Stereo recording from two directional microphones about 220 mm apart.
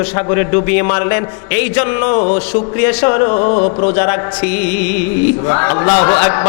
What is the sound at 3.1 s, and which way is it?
Speech, 25° left (ahead or behind).